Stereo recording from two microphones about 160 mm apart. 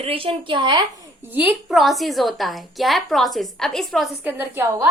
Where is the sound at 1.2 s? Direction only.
10° right (ahead or behind).